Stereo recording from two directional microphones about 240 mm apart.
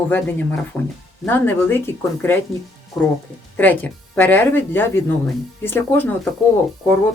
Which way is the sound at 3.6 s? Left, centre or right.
Centre.